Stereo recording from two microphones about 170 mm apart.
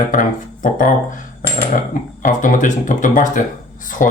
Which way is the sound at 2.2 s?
50° left (ahead or behind).